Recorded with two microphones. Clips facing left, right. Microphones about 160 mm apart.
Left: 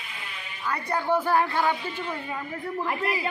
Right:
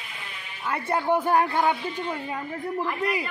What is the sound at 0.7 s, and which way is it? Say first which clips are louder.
A man's voice: right 2 dB; 20° right (ahead or behind).